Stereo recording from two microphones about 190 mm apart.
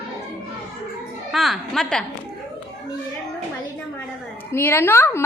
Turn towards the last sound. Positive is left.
turn(degrees=15)  # may be behind; listen again after turning